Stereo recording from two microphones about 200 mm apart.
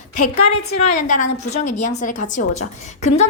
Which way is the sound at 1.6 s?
35° left (ahead or behind).